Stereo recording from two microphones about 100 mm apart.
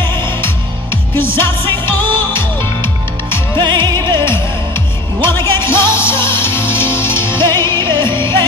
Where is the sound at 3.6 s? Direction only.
50° right (ahead or behind).